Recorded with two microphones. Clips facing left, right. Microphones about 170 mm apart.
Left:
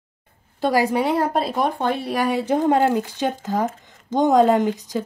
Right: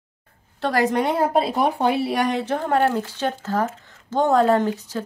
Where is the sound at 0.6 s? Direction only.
10° left (ahead or behind).